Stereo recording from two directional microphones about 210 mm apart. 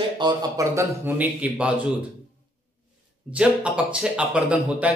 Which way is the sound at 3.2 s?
5° right (ahead or behind).